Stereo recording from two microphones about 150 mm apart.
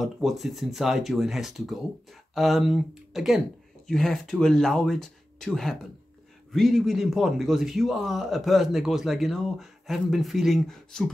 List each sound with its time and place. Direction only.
0.0 s a man's voice: centre (ahead or behind)